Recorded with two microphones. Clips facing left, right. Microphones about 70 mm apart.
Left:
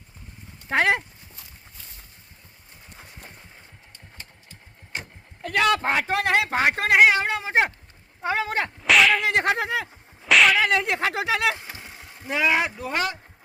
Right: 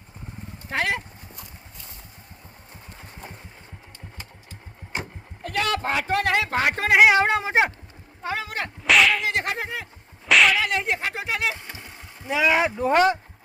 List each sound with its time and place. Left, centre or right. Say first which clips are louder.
0.7 s a man's voice: left 4 dB; left
5.5 s a man's voice: left 3 dB; left
6.1 s speech: right 2 dB; centre
6.7 s speech: right 1 dB; centre
7.1 s speech: right 4 dB; right
8.2 s speech: left 4 dB; left
8.8 s whip: even; centre
9.2 s a man's voice: left 3 dB; left
9.6 s speech: left 5 dB; left
10.2 s whip: even; centre
10.8 s speech: left 2 dB; left
11.7 s a sound: even; centre
12.8 s speech: right 8 dB; right